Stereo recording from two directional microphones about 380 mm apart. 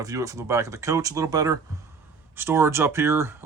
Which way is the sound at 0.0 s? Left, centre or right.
Centre.